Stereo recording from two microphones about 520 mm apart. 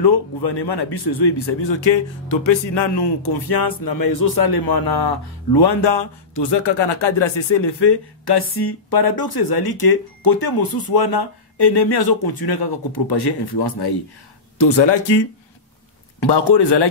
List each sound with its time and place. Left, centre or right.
0.0 s speech: left